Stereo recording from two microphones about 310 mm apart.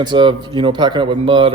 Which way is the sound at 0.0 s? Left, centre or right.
Centre.